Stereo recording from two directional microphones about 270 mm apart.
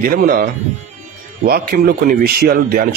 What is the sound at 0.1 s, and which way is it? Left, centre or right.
Speech, right.